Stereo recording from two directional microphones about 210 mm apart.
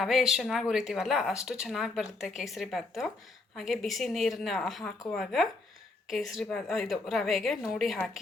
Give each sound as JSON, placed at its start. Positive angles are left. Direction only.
{"t": 0.0, "sound": "a woman's voice", "side_deg": 0}